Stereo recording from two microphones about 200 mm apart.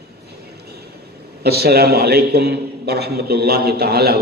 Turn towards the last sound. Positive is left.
turn(degrees=-50)  # may be behind; listen again after turning